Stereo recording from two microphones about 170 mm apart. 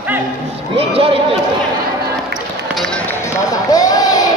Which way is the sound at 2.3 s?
Centre (ahead or behind).